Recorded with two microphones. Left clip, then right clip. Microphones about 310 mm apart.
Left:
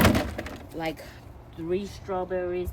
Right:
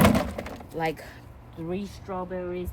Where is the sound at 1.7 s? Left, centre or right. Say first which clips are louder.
Left 4 dB; centre.